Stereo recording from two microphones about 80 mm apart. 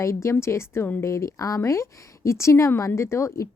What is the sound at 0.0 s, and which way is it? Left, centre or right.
A woman's voice, left.